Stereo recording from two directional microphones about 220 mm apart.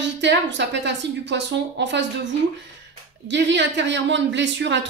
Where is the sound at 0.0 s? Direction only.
55° right (ahead or behind).